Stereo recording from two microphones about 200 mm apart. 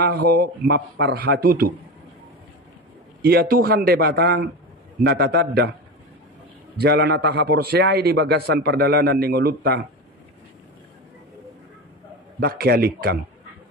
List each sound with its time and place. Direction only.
0.0 s a man's voice: 50° right (ahead or behind)
3.2 s a man's voice: 50° right (ahead or behind)
6.8 s a man's voice: 55° right (ahead or behind)
12.4 s a man's voice: 50° right (ahead or behind)